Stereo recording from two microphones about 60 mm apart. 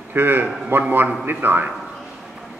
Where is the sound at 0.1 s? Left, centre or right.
Right.